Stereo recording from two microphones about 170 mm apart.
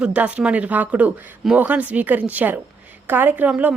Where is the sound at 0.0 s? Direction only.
5° right (ahead or behind).